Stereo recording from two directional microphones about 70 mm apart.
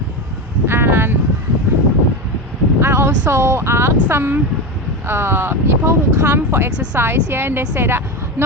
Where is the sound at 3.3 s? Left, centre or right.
Right.